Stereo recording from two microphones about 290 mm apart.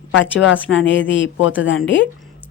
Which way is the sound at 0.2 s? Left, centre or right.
Left.